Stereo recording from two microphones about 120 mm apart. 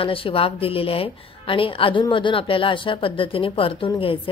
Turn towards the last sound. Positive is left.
turn(degrees=50)  # may be behind; listen again after turning